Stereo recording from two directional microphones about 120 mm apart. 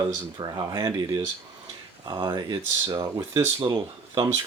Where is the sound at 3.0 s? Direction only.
30° right (ahead or behind).